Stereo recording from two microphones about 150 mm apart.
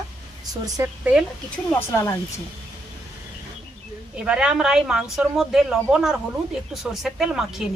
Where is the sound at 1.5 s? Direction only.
15° left (ahead or behind).